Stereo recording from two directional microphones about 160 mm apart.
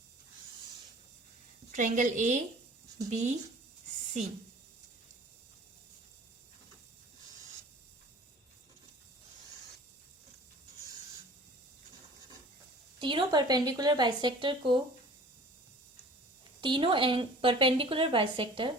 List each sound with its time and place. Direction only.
1.7 s a woman's voice: 50° right (ahead or behind)
13.0 s speech: 30° right (ahead or behind)
16.6 s a woman's voice: 30° right (ahead or behind)